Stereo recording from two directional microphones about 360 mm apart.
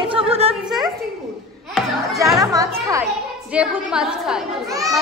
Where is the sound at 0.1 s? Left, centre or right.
Centre.